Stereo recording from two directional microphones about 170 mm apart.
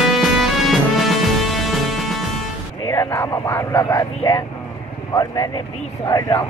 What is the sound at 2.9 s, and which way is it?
Vehicle, 15° left (ahead or behind).